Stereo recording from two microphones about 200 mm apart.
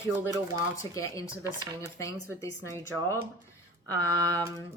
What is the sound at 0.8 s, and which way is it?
Speech, 15° left (ahead or behind).